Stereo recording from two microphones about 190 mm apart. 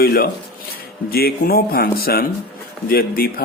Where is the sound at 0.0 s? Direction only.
55° left (ahead or behind).